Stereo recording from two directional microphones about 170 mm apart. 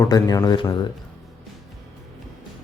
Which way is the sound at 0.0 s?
20° left (ahead or behind).